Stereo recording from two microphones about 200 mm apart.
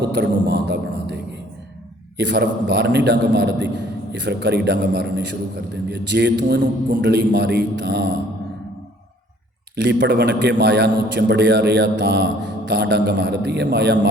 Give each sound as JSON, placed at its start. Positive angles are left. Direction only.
{"t": 0.0, "sound": "a man's voice", "side_deg": -65}
{"t": 9.7, "sound": "a man's voice", "side_deg": -60}